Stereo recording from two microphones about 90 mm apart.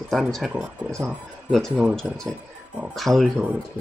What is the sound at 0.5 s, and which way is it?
Speech, 10° right (ahead or behind).